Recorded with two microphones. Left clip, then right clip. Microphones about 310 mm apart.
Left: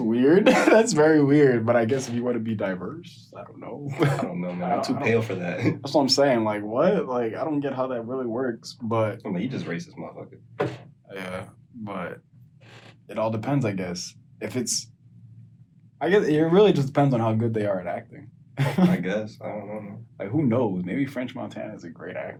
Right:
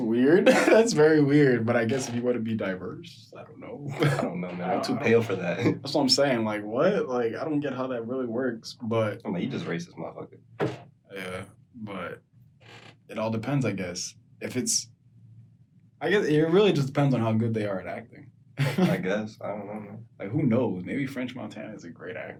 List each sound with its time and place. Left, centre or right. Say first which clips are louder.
0.1 s speech: left 2 dB; left
4.2 s speech: left 1 dB; centre
5.8 s speech: left 5 dB; centre
9.1 s speech: left 1 dB; centre
11.1 s a sound: left 2 dB; centre
13.1 s speech: left 4 dB; centre
16.0 s speech: left 3 dB; centre
19.0 s speech: left 1 dB; centre
20.1 s speech: left 3 dB; centre